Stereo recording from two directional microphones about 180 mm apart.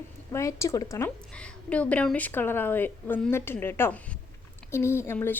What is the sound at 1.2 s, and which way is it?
A woman's voice, 5° left (ahead or behind).